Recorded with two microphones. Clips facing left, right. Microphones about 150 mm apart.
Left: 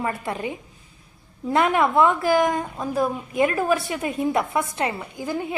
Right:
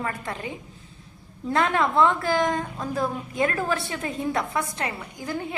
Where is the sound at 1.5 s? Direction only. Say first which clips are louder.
Left 3 dB; 15° left (ahead or behind).